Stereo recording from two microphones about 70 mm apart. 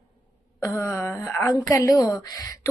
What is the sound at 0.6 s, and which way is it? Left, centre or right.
A woman's voice, left.